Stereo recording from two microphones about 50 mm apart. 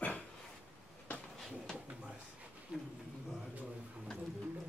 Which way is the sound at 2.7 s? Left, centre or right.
Centre.